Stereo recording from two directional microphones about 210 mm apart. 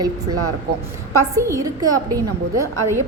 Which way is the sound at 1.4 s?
15° right (ahead or behind).